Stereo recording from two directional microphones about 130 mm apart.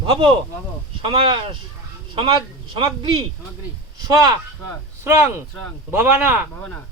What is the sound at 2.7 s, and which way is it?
Speech, 40° right (ahead or behind).